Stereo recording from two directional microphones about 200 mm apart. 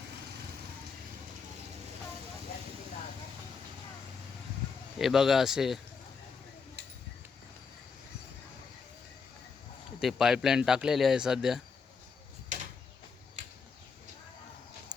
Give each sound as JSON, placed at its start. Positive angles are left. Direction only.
{"t": 4.9, "sound": "speech", "side_deg": 0}
{"t": 10.0, "sound": "speech", "side_deg": 0}
{"t": 12.5, "sound": "a sound", "side_deg": -40}